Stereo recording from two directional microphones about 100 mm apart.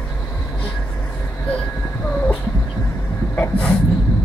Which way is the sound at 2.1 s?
15° left (ahead or behind).